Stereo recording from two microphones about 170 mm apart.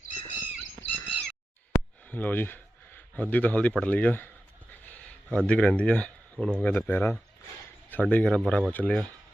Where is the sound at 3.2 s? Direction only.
10° left (ahead or behind).